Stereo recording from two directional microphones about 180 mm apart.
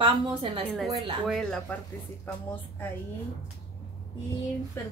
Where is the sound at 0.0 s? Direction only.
25° right (ahead or behind).